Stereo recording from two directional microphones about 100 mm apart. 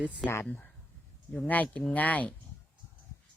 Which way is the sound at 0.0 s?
15° right (ahead or behind).